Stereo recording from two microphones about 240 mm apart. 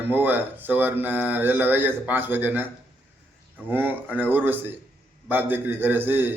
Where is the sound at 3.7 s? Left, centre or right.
Centre.